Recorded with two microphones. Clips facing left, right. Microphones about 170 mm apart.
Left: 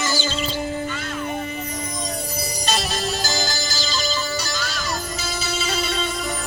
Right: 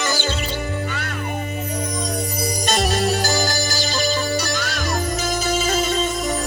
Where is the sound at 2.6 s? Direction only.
55° right (ahead or behind).